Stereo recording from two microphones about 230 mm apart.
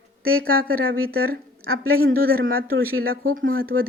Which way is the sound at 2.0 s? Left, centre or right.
Right.